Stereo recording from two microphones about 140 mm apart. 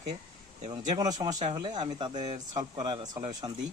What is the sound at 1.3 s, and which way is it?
Speech, 55° right (ahead or behind).